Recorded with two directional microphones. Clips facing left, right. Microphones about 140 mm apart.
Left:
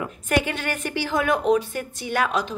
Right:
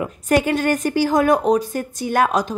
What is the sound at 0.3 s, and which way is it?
A woman's voice, 40° right (ahead or behind).